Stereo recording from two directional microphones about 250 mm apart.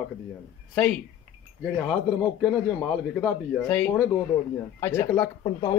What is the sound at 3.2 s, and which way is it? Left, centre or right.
A man's voice, centre.